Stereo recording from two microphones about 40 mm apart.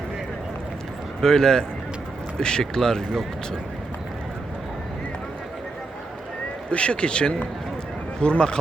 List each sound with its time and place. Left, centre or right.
1.2 s speech: centre
6.7 s a man's voice: left